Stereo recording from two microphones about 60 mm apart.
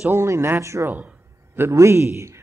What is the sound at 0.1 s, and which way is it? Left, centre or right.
A man's voice, right.